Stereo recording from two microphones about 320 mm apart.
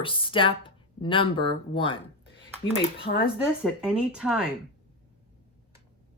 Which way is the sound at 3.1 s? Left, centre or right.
Left.